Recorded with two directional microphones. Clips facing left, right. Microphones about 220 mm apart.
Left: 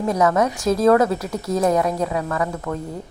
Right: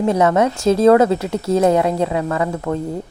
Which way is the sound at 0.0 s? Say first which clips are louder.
Right 3 dB; 25° right (ahead or behind).